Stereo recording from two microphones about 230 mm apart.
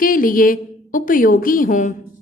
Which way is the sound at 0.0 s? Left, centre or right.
Left.